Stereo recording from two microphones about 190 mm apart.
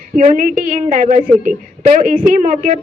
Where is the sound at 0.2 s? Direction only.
45° right (ahead or behind).